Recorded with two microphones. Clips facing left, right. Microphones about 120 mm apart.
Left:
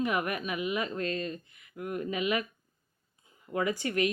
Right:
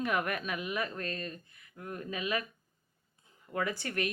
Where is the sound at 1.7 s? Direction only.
15° left (ahead or behind).